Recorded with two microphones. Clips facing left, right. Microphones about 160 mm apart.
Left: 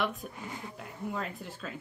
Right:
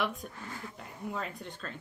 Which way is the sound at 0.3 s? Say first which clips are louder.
Left 2 dB; 15° left (ahead or behind).